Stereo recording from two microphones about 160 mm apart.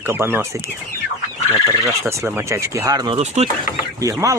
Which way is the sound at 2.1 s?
15° right (ahead or behind).